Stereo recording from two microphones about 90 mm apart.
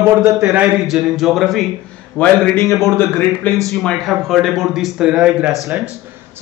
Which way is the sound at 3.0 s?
20° left (ahead or behind).